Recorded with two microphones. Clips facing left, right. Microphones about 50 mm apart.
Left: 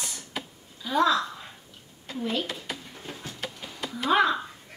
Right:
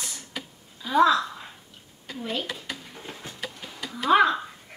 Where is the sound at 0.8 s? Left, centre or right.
Centre.